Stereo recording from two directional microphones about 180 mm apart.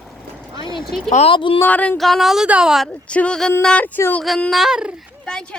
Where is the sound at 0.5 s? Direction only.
25° left (ahead or behind).